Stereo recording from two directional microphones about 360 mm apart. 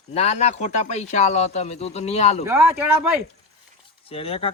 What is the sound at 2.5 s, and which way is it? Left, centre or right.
Speech, centre.